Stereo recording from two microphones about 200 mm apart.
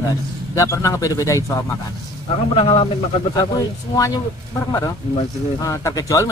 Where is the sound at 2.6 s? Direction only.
30° left (ahead or behind).